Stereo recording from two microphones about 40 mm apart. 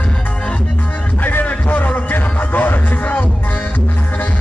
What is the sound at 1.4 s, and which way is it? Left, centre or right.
Music, left.